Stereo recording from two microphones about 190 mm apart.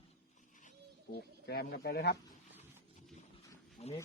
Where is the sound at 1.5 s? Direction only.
55° left (ahead or behind).